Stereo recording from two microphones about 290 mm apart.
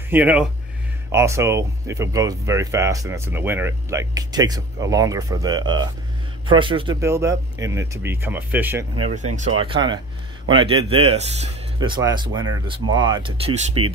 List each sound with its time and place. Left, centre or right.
0.1 s speech: centre
9.1 s speech: right